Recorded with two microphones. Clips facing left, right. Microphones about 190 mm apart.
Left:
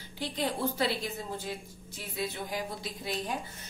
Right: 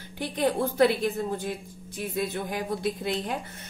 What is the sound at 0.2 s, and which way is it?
A woman's voice, 55° right (ahead or behind).